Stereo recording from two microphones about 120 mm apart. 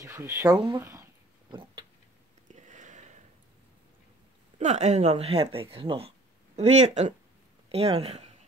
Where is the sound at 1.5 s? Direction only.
45° right (ahead or behind).